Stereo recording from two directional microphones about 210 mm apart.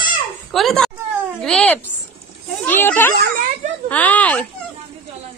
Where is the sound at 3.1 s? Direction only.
45° right (ahead or behind).